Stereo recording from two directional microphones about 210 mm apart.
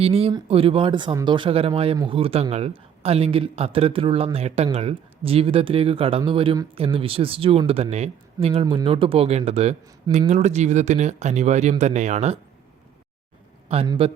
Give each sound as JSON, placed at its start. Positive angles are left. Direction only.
{"t": 0.0, "sound": "speech", "side_deg": -30}
{"t": 13.7, "sound": "a man's voice", "side_deg": -25}